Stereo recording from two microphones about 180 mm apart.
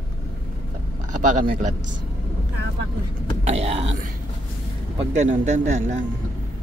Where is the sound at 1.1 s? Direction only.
45° right (ahead or behind).